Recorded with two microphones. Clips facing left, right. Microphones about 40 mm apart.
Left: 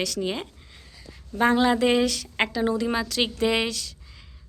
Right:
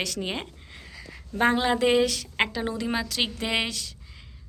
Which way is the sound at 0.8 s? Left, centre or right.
Right.